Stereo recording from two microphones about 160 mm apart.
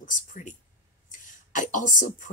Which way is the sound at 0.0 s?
55° left (ahead or behind).